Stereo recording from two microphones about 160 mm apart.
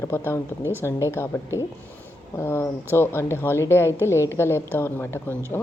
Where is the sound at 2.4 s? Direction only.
15° left (ahead or behind).